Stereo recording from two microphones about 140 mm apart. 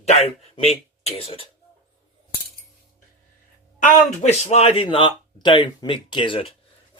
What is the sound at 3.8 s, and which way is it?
Speech, 50° left (ahead or behind).